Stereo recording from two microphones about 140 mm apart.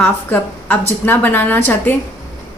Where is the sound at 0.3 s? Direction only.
15° left (ahead or behind).